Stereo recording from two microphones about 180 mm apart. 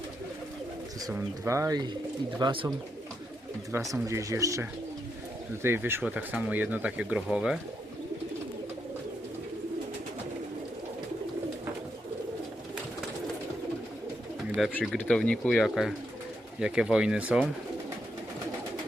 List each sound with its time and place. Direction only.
1.0 s speech: 15° right (ahead or behind)
4.1 s speech: 15° right (ahead or behind)
5.6 s speech: 15° right (ahead or behind)
14.8 s speech: 5° left (ahead or behind)